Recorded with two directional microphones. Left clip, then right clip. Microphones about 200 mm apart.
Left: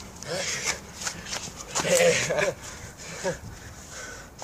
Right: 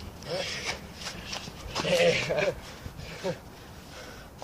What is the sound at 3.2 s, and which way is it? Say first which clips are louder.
Speech: left 3 dB; 5° left (ahead or behind).